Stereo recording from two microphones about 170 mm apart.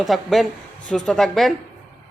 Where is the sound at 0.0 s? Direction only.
Centre (ahead or behind).